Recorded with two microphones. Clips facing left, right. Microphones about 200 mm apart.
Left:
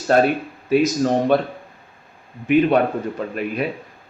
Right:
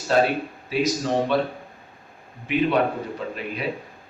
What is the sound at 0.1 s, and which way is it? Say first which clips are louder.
A man's voice: left 3 dB; 50° left (ahead or behind).